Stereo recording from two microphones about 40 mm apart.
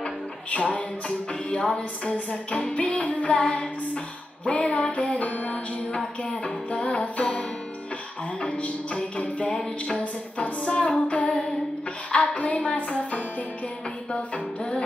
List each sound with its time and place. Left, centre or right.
0.0 s music: left
9.6 s music: left